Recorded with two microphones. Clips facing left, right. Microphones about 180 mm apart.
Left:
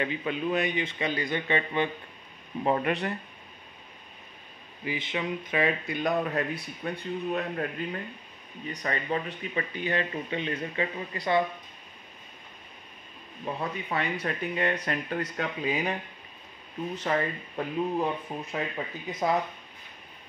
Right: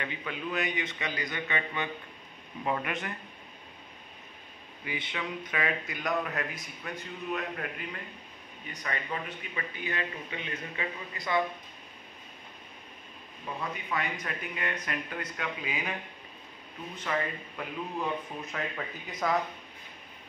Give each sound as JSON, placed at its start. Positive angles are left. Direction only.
{"t": 0.0, "sound": "a man's voice", "side_deg": 25}
{"t": 4.8, "sound": "a man's voice", "side_deg": 25}
{"t": 13.6, "sound": "speech", "side_deg": 35}
{"t": 17.0, "sound": "speech", "side_deg": 35}